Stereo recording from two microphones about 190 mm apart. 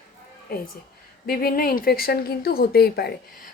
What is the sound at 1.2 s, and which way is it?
Speech, 50° left (ahead or behind).